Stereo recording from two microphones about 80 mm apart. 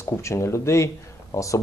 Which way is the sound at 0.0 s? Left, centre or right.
Left.